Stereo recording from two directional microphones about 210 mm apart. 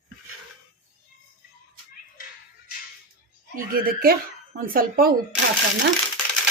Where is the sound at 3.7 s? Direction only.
45° right (ahead or behind).